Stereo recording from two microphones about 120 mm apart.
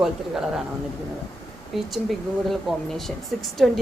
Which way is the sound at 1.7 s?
Centre (ahead or behind).